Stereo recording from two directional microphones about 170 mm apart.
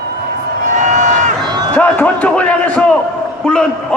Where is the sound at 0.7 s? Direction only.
45° right (ahead or behind).